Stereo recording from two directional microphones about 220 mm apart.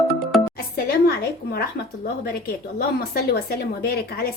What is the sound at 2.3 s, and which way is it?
A woman's voice, 45° left (ahead or behind).